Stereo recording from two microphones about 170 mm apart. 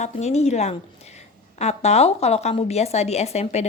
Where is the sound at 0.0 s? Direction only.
40° left (ahead or behind).